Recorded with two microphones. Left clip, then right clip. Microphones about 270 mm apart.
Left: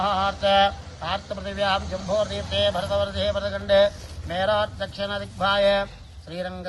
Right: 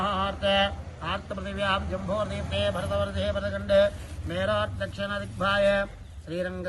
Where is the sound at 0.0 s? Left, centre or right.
Centre.